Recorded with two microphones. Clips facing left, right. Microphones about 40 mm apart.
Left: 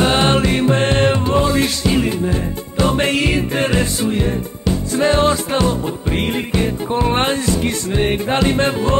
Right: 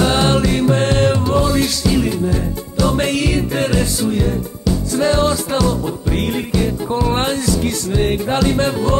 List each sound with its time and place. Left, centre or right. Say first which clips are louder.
0.0 s music: even; left